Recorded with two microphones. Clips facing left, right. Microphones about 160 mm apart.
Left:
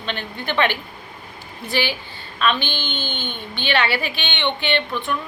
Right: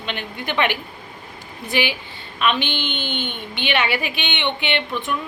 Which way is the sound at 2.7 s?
65° right (ahead or behind).